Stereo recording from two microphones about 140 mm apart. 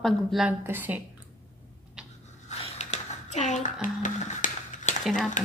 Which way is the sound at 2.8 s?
55° left (ahead or behind).